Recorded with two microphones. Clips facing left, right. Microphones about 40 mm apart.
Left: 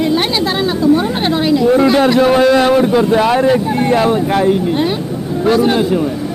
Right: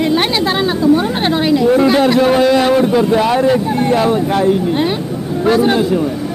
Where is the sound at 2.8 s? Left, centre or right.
Centre.